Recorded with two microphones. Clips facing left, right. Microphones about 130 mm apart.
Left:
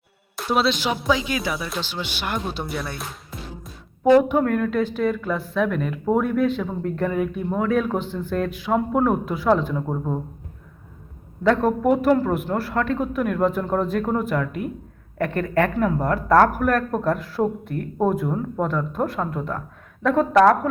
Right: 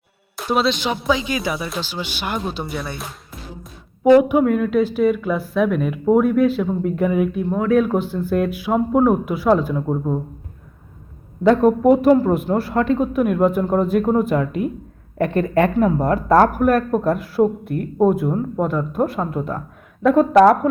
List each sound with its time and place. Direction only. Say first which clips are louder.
0.3 s speech: right 2 dB; centre (ahead or behind)
11.4 s speech: right 5 dB; 20° right (ahead or behind)